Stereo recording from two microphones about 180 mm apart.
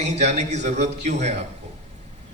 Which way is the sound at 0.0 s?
40° right (ahead or behind).